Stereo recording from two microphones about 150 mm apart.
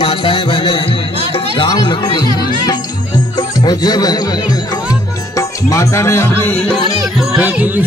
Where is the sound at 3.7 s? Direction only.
25° left (ahead or behind).